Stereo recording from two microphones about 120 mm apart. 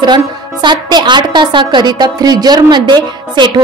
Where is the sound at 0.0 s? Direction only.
40° right (ahead or behind).